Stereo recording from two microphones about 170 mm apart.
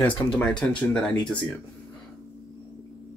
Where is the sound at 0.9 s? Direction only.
5° left (ahead or behind).